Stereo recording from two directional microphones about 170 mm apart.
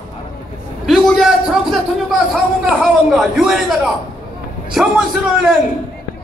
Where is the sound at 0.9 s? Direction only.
Centre (ahead or behind).